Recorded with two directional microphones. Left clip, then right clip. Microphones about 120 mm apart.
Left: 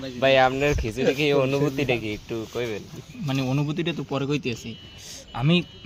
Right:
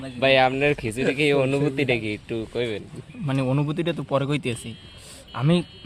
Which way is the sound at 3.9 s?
75° right (ahead or behind).